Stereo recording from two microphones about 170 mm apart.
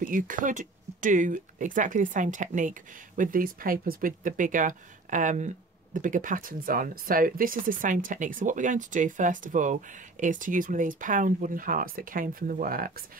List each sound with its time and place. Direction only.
0.0 s speech: 50° right (ahead or behind)